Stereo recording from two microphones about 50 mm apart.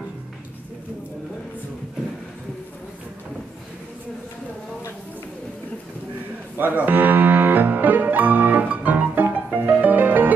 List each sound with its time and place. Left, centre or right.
6.5 s music: right